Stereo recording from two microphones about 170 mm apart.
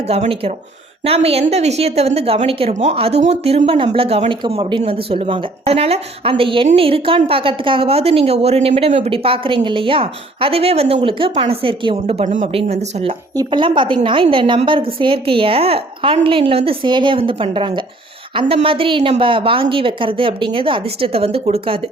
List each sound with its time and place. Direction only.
0.0 s a woman's voice: 35° right (ahead or behind)
13.3 s a woman's voice: 25° right (ahead or behind)